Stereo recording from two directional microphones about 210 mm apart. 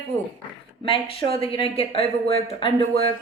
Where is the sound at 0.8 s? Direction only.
25° left (ahead or behind).